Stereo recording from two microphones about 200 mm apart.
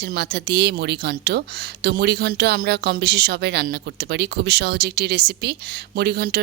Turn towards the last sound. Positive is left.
turn(degrees=-50)  # may be behind; listen again after turning